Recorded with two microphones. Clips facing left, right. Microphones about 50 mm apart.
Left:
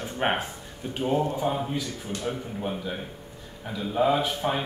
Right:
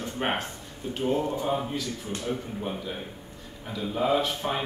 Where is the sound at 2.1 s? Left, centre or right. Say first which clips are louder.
Left 3 dB; right.